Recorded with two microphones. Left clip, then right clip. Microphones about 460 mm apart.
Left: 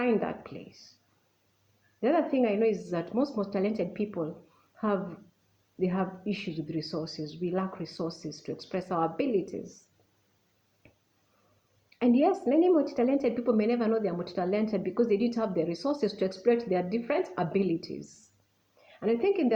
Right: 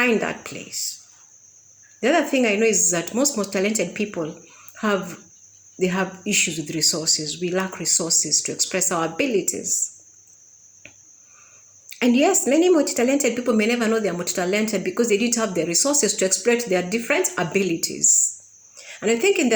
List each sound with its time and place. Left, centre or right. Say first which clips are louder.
0.0 s a woman's voice: right 8 dB; left
2.0 s a woman's voice: right 7 dB; left
11.9 s a woman's voice: right 7 dB; left